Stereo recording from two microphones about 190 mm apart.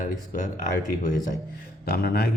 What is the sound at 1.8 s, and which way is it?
Speech, 55° left (ahead or behind).